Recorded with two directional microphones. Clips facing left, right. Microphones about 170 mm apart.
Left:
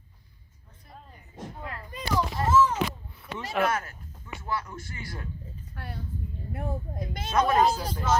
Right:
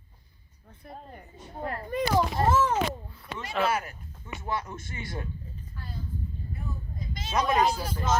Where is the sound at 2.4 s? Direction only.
55° right (ahead or behind).